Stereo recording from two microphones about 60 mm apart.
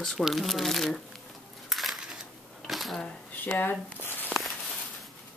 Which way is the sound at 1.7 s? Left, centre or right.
Centre.